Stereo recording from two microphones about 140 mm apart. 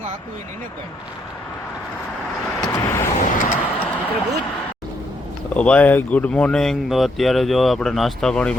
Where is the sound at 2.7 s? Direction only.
20° left (ahead or behind).